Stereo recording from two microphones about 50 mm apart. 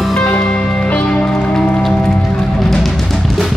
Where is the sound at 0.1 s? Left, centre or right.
Centre.